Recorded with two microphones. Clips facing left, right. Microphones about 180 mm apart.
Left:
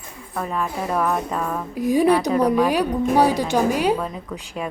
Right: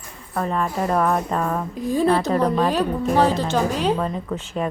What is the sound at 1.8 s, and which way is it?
Speech, 15° left (ahead or behind).